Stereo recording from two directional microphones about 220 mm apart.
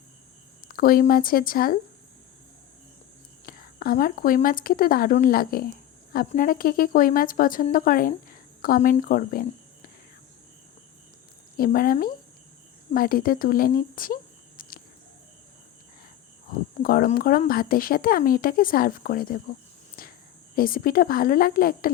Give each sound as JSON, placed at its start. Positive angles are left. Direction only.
{"t": 0.7, "sound": "a woman's voice", "side_deg": 40}
{"t": 3.4, "sound": "a woman's voice", "side_deg": 40}
{"t": 11.5, "sound": "a woman's voice", "side_deg": 40}
{"t": 14.6, "sound": "cricket", "side_deg": 40}
{"t": 16.8, "sound": "a woman's voice", "side_deg": 40}
{"t": 20.0, "sound": "a sound", "side_deg": 40}
{"t": 20.6, "sound": "a woman's voice", "side_deg": 40}